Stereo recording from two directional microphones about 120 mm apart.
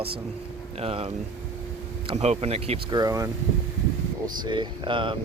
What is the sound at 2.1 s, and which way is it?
Speech, 65° right (ahead or behind).